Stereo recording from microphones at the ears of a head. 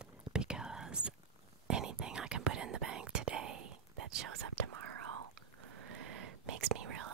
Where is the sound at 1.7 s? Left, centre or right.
Right.